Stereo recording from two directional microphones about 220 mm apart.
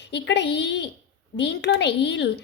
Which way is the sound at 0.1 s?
50° left (ahead or behind).